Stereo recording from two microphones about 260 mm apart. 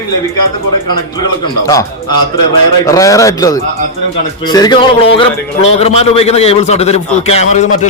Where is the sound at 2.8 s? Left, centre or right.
Centre.